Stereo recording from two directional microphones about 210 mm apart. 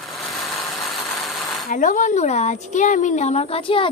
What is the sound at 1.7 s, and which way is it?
A woman's voice, 40° left (ahead or behind).